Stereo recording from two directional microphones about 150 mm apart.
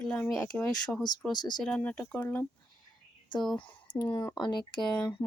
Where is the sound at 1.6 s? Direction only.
5° left (ahead or behind).